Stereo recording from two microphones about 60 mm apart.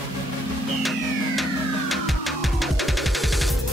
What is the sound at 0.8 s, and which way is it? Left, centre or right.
Music, centre.